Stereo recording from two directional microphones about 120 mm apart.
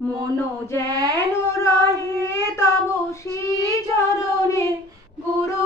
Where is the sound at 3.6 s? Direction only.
25° left (ahead or behind).